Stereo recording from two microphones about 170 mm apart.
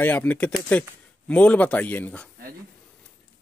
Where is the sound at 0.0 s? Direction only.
10° left (ahead or behind).